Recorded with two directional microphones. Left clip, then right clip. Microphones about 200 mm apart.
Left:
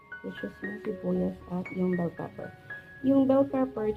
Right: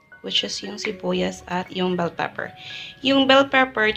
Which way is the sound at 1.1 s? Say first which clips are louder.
Right 9 dB; 40° right (ahead or behind).